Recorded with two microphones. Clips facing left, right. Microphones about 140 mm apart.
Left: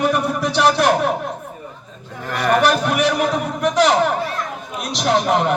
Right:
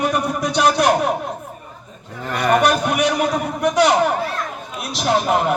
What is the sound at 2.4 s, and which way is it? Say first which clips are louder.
A man's voice: even; centre (ahead or behind).